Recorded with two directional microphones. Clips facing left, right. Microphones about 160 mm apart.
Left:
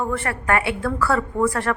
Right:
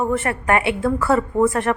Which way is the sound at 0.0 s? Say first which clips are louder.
Right 4 dB; 20° right (ahead or behind).